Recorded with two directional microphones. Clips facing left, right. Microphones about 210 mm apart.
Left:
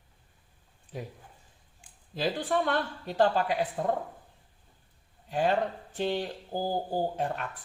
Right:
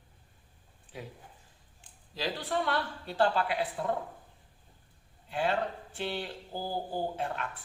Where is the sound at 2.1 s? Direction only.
50° left (ahead or behind).